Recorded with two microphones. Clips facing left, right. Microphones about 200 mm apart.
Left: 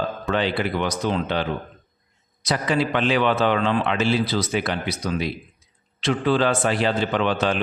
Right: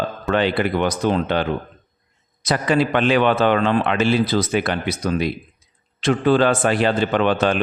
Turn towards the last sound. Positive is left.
turn(degrees=-55)  # may be behind; listen again after turning